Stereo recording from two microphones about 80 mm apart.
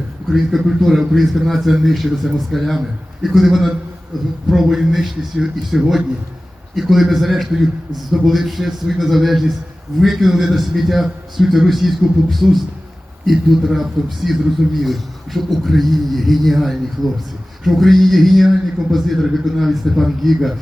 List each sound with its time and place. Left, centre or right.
0.3 s a man's voice: centre